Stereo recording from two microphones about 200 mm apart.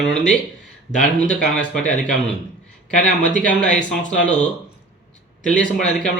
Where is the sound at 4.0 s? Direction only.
40° left (ahead or behind).